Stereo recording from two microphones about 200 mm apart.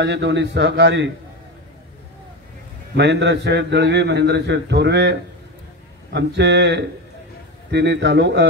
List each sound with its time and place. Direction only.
0.0 s a man's voice: 60° right (ahead or behind)
3.0 s a man's voice: 60° right (ahead or behind)
6.1 s a man's voice: 60° right (ahead or behind)